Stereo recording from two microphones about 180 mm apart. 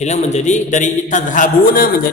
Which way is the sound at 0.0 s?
40° left (ahead or behind).